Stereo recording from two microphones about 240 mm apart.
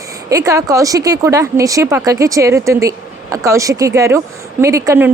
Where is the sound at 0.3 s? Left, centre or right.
Centre.